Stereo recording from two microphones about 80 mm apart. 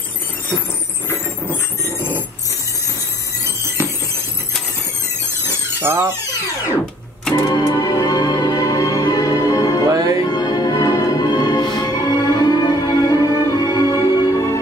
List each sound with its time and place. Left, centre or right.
3.4 s a sound: right
5.5 s squeal: right
7.3 s music: left
9.8 s music: right
10.3 s music: left